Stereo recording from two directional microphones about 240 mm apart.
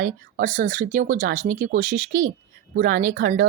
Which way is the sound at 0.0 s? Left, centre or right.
Right.